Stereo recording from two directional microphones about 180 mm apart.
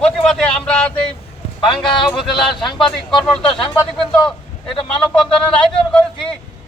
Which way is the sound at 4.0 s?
5° left (ahead or behind).